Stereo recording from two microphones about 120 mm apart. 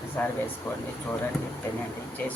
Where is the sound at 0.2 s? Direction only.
15° left (ahead or behind).